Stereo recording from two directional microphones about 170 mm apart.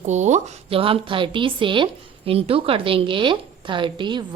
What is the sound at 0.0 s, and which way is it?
A woman's voice, 45° right (ahead or behind).